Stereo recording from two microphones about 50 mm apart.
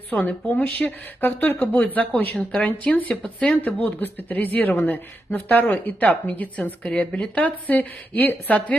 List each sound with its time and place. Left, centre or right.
0.1 s a man's voice: left
3.5 s a man's voice: left
7.4 s a man's voice: left